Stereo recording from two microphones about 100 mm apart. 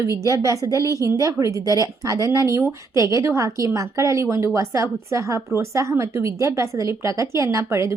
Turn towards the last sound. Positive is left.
turn(degrees=-30)  # may be behind; listen again after turning